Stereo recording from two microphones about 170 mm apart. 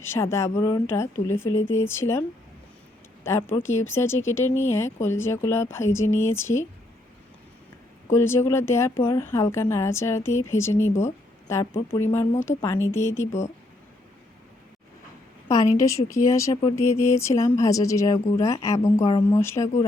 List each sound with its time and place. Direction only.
0.0 s speech: 15° left (ahead or behind)
3.2 s speech: 15° left (ahead or behind)
8.1 s speech: 15° left (ahead or behind)
15.8 s speech: 15° left (ahead or behind)